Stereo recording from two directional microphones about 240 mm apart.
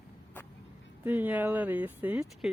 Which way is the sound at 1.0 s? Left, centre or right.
Centre.